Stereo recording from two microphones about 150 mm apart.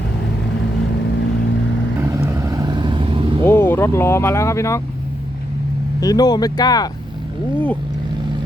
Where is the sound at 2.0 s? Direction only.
20° right (ahead or behind); by 3.3 s 35° right (ahead or behind).